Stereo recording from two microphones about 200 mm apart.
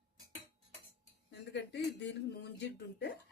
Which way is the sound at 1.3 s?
60° left (ahead or behind).